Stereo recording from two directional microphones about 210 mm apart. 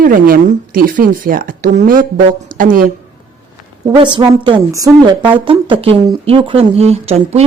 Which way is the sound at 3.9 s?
20° right (ahead or behind).